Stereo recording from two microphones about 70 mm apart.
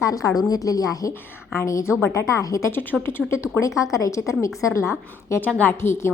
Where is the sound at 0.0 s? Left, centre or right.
Left.